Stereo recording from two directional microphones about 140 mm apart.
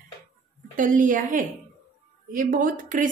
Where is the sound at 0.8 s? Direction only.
75° right (ahead or behind).